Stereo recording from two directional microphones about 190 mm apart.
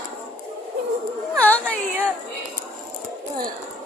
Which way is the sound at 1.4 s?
5° left (ahead or behind).